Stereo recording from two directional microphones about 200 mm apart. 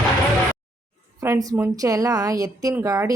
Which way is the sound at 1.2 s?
15° right (ahead or behind).